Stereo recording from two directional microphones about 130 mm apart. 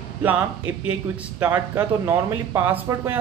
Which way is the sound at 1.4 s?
20° right (ahead or behind).